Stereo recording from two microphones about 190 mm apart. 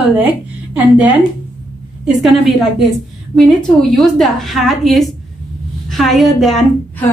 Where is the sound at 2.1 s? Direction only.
Centre (ahead or behind).